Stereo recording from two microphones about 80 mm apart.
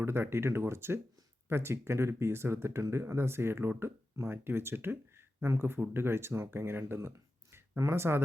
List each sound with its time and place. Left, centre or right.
0.0 s speech: right